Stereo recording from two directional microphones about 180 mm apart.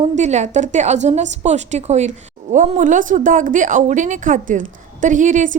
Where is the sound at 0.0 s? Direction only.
40° right (ahead or behind).